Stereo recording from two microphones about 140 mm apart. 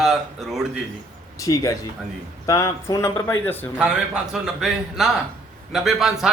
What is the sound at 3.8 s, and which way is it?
A man's voice, 5° right (ahead or behind).